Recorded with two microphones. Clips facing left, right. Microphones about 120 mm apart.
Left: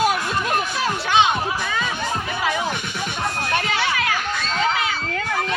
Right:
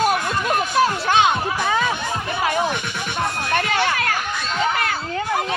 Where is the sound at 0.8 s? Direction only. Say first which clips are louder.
Right 3 dB; 45° right (ahead or behind).